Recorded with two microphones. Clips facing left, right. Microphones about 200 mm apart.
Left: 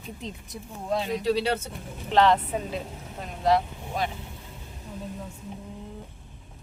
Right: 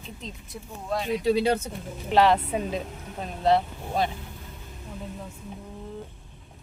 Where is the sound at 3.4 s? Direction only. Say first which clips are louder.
Right 1 dB; 30° right (ahead or behind).